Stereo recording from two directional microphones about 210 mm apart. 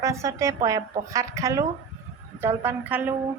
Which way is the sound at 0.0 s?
15° right (ahead or behind).